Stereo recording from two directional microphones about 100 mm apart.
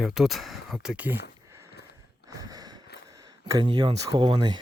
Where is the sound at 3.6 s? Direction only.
45° right (ahead or behind).